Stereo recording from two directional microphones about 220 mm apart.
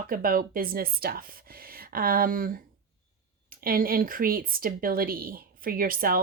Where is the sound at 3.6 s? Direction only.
40° right (ahead or behind).